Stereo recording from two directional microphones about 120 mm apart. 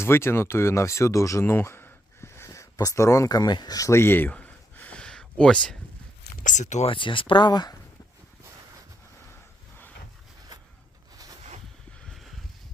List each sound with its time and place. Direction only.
0.0 s speech: 20° left (ahead or behind)
6.4 s speech: 90° left
6.8 s speech: 45° left (ahead or behind)
12.0 s a sound: centre (ahead or behind)